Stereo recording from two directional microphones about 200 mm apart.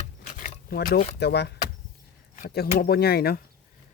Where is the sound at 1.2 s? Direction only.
55° left (ahead or behind).